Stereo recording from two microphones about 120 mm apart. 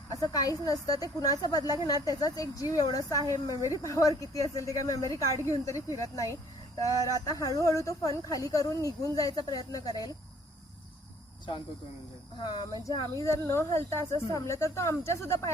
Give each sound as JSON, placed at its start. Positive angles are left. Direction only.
{"t": 0.1, "sound": "speech", "side_deg": 30}
{"t": 12.4, "sound": "speech", "side_deg": 40}